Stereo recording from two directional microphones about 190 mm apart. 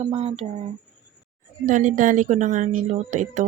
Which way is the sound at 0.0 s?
30° right (ahead or behind).